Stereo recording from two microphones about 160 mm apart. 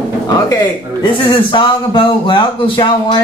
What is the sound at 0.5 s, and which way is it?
A man's voice, 30° left (ahead or behind).